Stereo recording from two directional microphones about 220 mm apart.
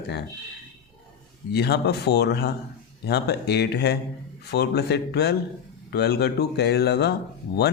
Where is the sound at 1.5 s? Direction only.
45° left (ahead or behind).